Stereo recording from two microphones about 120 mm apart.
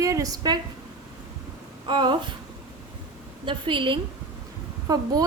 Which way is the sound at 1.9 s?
40° right (ahead or behind).